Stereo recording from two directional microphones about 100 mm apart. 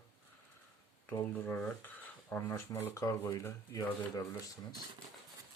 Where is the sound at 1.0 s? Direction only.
20° left (ahead or behind).